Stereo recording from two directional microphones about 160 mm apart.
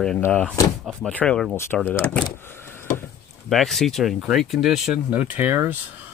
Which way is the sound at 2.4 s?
15° left (ahead or behind).